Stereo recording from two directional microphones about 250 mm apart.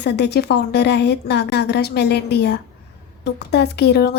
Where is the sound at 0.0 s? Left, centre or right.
Left.